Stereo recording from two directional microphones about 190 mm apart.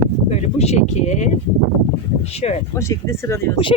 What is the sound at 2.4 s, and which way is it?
Speech, 35° left (ahead or behind).